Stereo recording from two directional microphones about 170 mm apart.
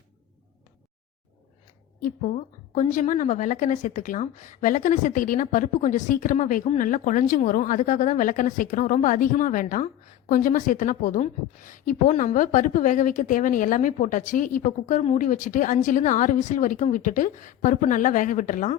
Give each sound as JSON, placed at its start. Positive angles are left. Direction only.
{"t": 2.0, "sound": "a woman's voice", "side_deg": 55}